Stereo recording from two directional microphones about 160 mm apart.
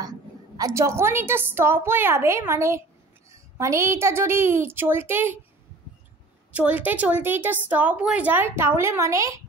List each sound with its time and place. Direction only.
0.6 s a woman's voice: 20° right (ahead or behind)
6.5 s a woman's voice: 10° right (ahead or behind)